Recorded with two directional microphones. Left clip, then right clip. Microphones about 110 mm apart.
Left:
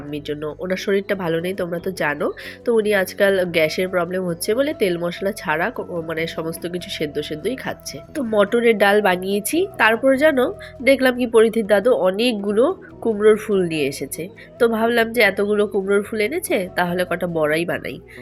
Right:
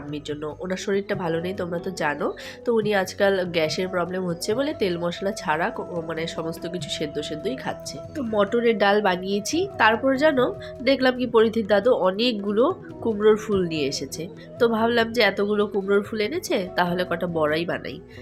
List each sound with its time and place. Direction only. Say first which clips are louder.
0.1 s speech: left 4 dB; 25° left (ahead or behind)